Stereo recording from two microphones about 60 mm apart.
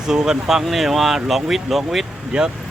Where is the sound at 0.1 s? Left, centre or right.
Centre.